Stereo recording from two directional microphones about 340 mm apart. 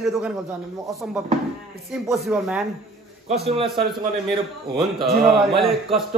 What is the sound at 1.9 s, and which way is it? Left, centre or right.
Speech, centre.